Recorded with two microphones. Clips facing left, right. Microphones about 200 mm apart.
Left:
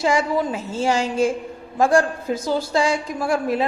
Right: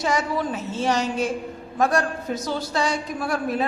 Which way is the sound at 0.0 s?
30° left (ahead or behind).